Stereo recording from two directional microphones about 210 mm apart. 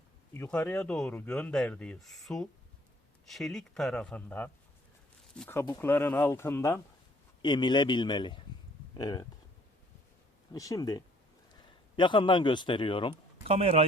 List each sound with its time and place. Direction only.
0.3 s a man's voice: 10° left (ahead or behind)
10.5 s a man's voice: 15° left (ahead or behind)
13.5 s speech: 30° right (ahead or behind)